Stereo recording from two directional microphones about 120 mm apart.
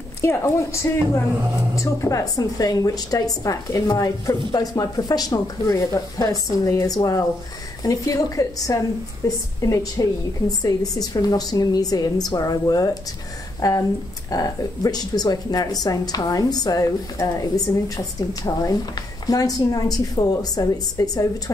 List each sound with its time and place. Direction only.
0.2 s a woman's voice: 25° left (ahead or behind)